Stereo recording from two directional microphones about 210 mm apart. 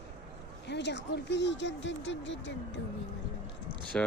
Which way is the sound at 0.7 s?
55° left (ahead or behind).